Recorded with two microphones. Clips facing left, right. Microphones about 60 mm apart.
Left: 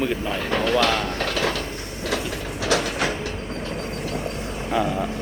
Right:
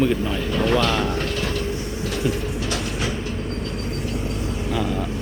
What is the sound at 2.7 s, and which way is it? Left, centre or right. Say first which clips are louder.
Train: left 8 dB; left.